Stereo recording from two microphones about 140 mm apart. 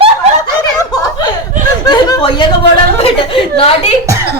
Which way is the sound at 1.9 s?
35° left (ahead or behind).